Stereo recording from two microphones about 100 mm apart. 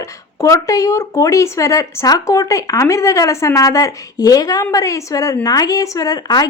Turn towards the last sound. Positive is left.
turn(degrees=40)  # may be behind; listen again after turning